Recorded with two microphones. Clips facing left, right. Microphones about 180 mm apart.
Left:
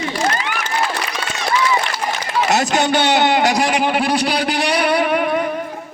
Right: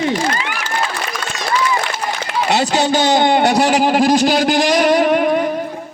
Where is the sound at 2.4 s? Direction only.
35° right (ahead or behind).